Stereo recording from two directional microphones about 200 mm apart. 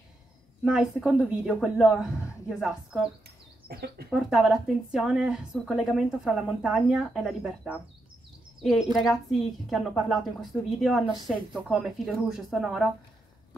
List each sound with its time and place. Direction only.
0.7 s a woman's voice: 5° right (ahead or behind)
3.6 s speech: 55° right (ahead or behind)
4.1 s a woman's voice: centre (ahead or behind)
8.9 s a woman's voice: centre (ahead or behind)